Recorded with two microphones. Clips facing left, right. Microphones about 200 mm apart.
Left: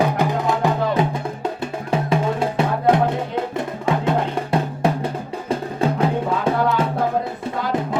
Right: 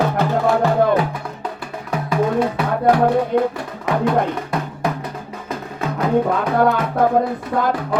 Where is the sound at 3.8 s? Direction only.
25° left (ahead or behind).